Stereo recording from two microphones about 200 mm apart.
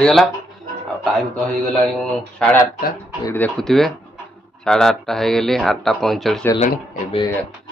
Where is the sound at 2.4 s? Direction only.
5° left (ahead or behind).